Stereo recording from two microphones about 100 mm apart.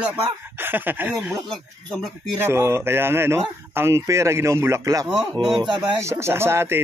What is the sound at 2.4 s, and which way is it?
Speech, 25° right (ahead or behind).